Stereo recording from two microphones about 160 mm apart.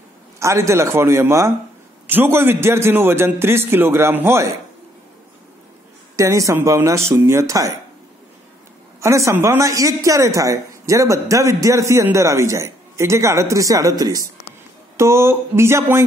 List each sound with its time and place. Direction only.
0.4 s a man's voice: 20° right (ahead or behind)
6.1 s a man's voice: 20° right (ahead or behind)
9.0 s a man's voice: 20° right (ahead or behind)